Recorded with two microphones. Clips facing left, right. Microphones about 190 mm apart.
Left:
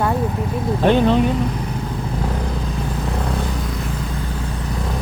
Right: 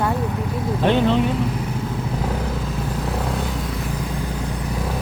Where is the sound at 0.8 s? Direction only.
45° left (ahead or behind).